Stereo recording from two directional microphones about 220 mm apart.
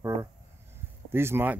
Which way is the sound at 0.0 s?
15° right (ahead or behind).